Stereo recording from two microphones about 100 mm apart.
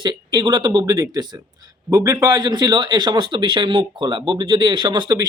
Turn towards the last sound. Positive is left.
turn(degrees=-50)  # may be behind; listen again after turning